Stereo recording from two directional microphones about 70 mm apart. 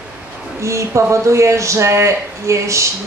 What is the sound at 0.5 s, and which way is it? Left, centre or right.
Speech, right.